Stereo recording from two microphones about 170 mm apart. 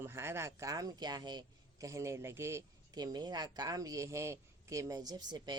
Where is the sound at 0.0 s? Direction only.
15° right (ahead or behind).